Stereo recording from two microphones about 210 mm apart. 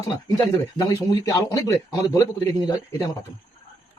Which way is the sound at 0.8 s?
15° left (ahead or behind).